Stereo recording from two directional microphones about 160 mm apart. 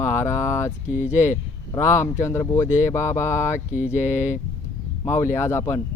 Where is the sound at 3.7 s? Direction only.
10° right (ahead or behind).